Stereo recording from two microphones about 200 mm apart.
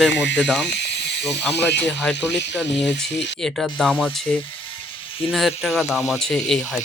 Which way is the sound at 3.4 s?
Centre (ahead or behind).